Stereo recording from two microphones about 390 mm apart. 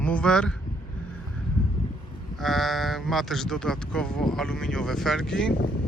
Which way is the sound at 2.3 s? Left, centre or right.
Centre.